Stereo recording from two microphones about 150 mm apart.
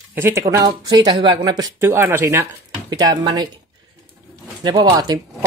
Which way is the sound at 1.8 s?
15° right (ahead or behind).